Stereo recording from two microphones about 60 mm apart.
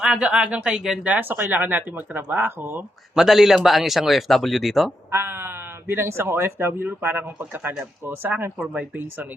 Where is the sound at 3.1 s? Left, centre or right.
Centre.